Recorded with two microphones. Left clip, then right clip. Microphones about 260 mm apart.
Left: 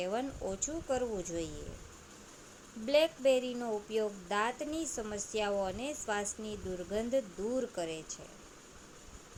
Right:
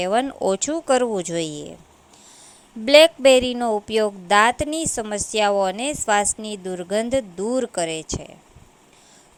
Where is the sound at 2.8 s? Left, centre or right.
Right.